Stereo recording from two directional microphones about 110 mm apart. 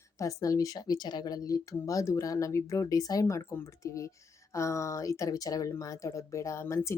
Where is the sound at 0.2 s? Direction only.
30° left (ahead or behind).